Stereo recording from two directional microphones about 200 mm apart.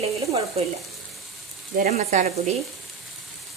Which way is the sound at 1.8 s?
40° right (ahead or behind).